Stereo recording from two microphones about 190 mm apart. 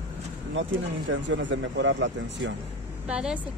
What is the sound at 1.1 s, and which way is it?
Speech, 75° right (ahead or behind).